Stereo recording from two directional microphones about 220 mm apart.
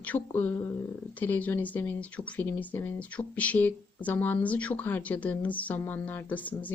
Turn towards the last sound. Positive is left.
turn(degrees=5)  # may be behind; listen again after turning